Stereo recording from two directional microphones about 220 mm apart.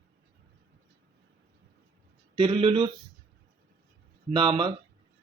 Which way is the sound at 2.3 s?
25° right (ahead or behind).